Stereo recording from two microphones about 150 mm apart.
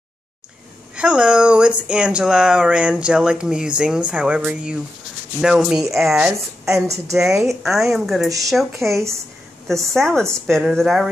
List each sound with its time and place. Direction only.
0.9 s speech: 5° right (ahead or behind)
6.6 s a woman's voice: 20° right (ahead or behind)
7.2 s speech: 5° right (ahead or behind)
9.9 s speech: 5° left (ahead or behind)